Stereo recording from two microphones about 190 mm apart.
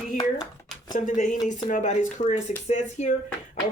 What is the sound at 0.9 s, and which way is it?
Speech, 40° left (ahead or behind).